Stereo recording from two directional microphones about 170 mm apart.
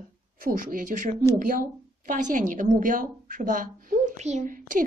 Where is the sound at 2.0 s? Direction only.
50° right (ahead or behind).